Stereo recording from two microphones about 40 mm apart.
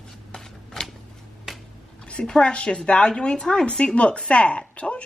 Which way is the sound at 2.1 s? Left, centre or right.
Left.